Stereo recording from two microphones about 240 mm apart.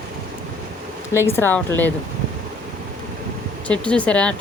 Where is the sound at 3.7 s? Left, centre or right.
Centre.